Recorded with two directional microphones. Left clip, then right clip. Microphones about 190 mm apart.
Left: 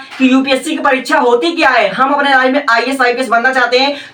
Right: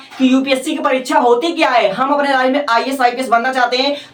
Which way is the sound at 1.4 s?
15° right (ahead or behind).